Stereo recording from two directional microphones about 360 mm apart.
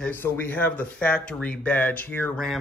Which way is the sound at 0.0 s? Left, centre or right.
Centre.